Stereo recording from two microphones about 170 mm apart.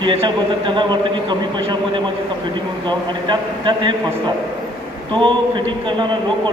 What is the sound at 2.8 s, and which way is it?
Speech, 25° right (ahead or behind).